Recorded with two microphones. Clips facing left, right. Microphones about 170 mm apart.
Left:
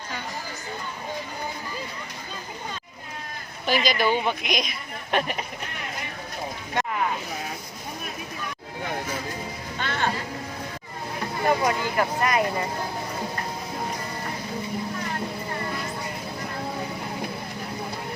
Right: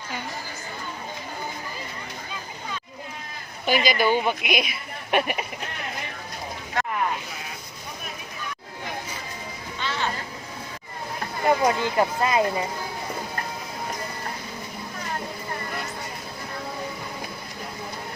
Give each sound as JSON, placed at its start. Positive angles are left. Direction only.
{"t": 3.7, "sound": "a woman's voice", "side_deg": 0}
{"t": 9.7, "sound": "music", "side_deg": 50}
{"t": 11.4, "sound": "speech", "side_deg": -25}